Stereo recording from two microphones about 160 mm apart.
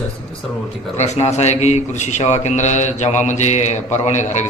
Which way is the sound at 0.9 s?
45° left (ahead or behind).